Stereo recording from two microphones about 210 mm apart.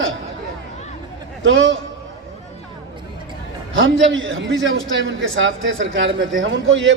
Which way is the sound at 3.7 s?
65° right (ahead or behind).